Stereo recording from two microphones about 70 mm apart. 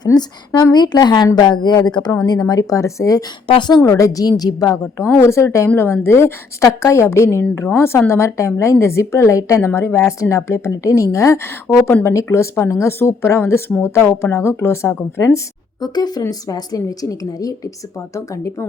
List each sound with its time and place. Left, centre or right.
0.0 s a woman's voice: left
2.2 s a woman's voice: left
3.8 s a woman's voice: left
5.2 s a woman's voice: left
15.8 s a woman's voice: left